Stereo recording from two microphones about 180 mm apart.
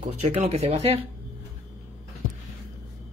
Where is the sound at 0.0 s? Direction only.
35° right (ahead or behind).